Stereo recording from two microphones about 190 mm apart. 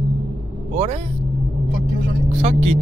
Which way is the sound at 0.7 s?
35° right (ahead or behind).